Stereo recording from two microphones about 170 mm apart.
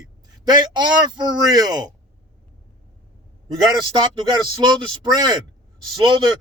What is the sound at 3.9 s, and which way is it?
Speech, 25° right (ahead or behind).